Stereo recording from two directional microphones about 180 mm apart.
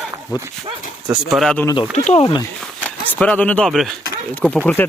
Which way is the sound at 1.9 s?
40° left (ahead or behind).